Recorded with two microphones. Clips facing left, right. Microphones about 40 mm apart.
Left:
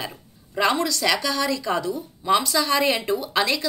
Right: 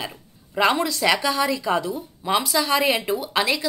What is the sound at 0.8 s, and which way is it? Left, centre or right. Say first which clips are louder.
Speech: right 2 dB; right.